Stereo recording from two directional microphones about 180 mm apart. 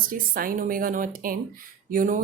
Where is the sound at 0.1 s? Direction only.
55° right (ahead or behind).